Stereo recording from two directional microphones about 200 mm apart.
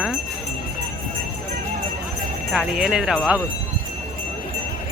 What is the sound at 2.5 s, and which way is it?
Speech, centre (ahead or behind).